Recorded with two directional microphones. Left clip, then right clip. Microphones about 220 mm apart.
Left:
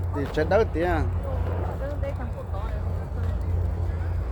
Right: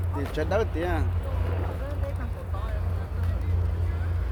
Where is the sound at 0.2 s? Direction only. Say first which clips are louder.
Left 5 dB; 20° left (ahead or behind).